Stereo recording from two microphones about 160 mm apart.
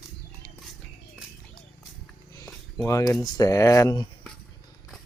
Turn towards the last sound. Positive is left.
turn(degrees=20)  # may be behind; listen again after turning